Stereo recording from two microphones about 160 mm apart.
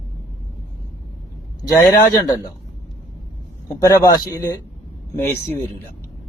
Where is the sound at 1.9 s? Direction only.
25° left (ahead or behind).